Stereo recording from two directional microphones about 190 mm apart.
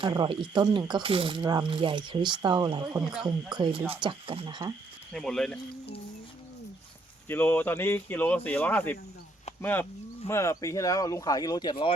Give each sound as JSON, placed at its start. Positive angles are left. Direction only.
{"t": 0.0, "sound": "speech", "side_deg": -25}
{"t": 5.1, "sound": "speech", "side_deg": 0}
{"t": 7.3, "sound": "speech", "side_deg": 10}